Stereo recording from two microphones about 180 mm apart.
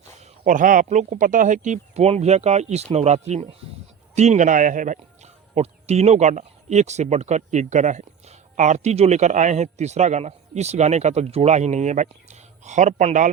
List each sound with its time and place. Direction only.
0.2 s speech: 45° right (ahead or behind)